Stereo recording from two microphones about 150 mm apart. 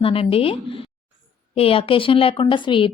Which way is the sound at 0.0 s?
40° left (ahead or behind).